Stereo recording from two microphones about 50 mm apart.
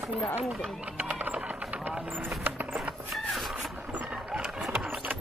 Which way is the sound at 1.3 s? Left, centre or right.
Right.